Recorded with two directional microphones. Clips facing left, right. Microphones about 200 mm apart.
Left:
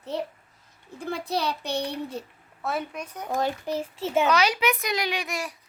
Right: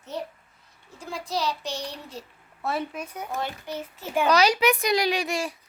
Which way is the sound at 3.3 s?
35° left (ahead or behind).